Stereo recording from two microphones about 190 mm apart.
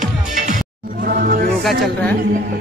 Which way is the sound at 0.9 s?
50° right (ahead or behind).